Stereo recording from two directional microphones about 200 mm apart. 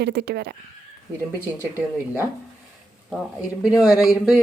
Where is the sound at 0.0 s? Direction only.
55° right (ahead or behind).